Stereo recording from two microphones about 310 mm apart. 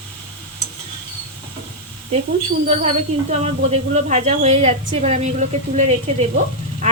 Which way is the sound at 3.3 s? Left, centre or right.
Right.